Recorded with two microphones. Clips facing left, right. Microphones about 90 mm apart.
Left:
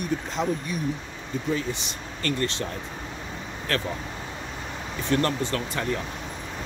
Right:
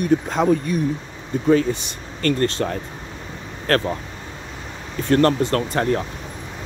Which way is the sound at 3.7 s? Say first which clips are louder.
Right 9 dB; 50° right (ahead or behind).